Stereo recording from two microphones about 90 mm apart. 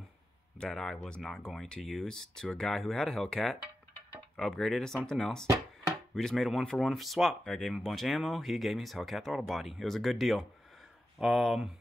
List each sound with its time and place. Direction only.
0.6 s speech: 5° left (ahead or behind)